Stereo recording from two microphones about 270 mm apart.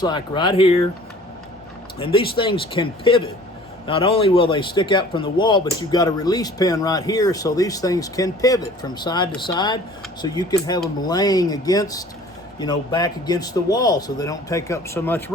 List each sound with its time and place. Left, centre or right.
0.0 s speech: centre
2.0 s speech: centre